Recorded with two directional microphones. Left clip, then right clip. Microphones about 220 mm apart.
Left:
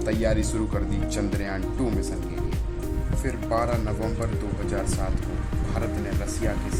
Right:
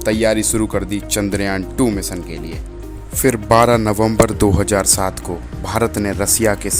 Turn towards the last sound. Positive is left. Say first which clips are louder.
# right 13 dB
turn(degrees=-45)  # may be behind; listen again after turning